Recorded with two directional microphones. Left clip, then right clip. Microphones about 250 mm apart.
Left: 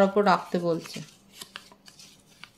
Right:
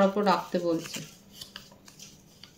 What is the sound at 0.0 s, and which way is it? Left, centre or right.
Speech, left.